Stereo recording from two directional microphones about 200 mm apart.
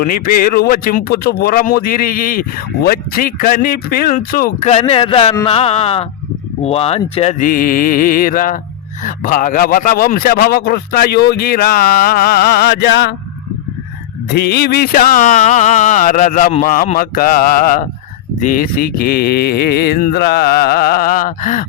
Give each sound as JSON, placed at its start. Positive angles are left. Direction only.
{"t": 0.0, "sound": "speech", "side_deg": 45}
{"t": 4.7, "sound": "speech", "side_deg": 30}
{"t": 14.3, "sound": "music", "side_deg": 55}
{"t": 18.3, "sound": "speech", "side_deg": 40}